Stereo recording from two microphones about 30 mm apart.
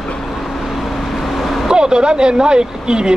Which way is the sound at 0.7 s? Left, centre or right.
Centre.